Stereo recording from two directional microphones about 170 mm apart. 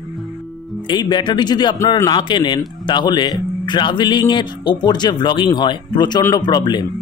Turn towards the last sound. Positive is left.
turn(degrees=25)  # may be behind; listen again after turning